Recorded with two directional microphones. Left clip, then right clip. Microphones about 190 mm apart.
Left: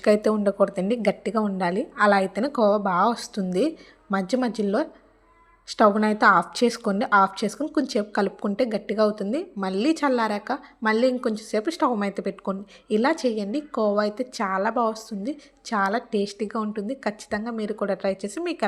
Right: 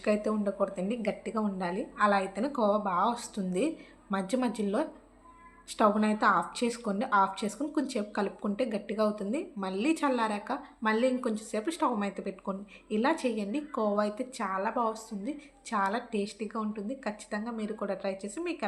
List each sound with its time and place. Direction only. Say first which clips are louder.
0.0 s speech: left 9 dB; 40° left (ahead or behind)